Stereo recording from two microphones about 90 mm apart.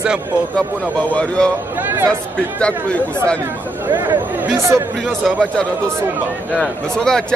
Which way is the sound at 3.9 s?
25° right (ahead or behind).